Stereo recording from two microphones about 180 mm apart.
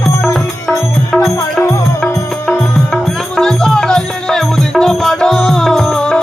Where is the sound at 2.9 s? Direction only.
5° left (ahead or behind).